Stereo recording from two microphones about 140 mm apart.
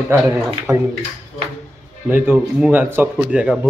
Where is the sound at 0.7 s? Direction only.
Centre (ahead or behind).